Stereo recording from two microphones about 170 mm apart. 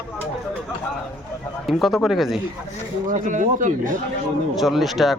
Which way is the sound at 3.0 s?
50° right (ahead or behind).